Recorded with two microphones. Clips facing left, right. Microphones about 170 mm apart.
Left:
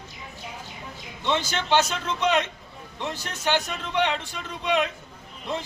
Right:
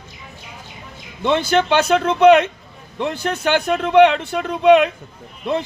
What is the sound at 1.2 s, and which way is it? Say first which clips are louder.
A man's voice: right 10 dB; 60° right (ahead or behind).